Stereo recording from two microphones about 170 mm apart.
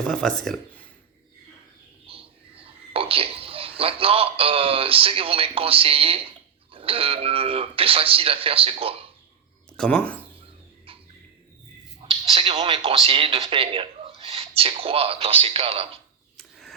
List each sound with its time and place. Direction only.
0.0 s speech: 5° left (ahead or behind)
2.0 s speech: 35° right (ahead or behind)
9.7 s speech: 5° left (ahead or behind)
10.9 s bird: 35° right (ahead or behind)
11.9 s speech: 35° right (ahead or behind)
16.4 s a sound: centre (ahead or behind)